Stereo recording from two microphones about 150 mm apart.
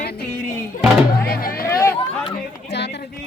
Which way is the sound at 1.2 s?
80° left.